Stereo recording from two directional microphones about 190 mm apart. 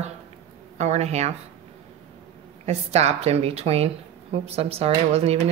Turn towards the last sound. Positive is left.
turn(degrees=-35)  # may be behind; listen again after turning